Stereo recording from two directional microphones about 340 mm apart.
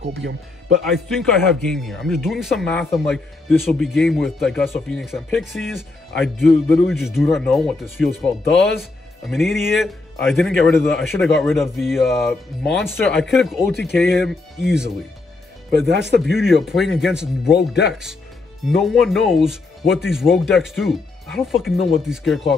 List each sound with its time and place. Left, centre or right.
0.9 s speech: centre
15.7 s speech: right
16.3 s speech: centre
17.6 s speech: left
18.7 s speech: centre